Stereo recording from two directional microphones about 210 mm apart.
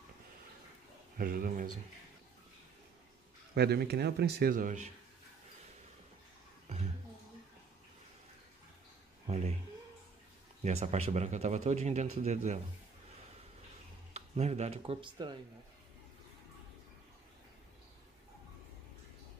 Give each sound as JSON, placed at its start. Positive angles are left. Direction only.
{"t": 1.1, "sound": "a man's voice", "side_deg": -40}
{"t": 3.5, "sound": "speech", "side_deg": -50}
{"t": 10.6, "sound": "a man's voice", "side_deg": -30}
{"t": 14.1, "sound": "speech", "side_deg": -30}